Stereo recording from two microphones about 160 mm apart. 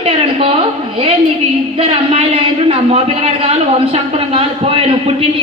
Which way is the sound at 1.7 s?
35° right (ahead or behind).